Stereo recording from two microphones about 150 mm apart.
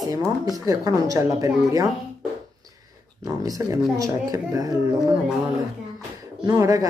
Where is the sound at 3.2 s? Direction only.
25° right (ahead or behind).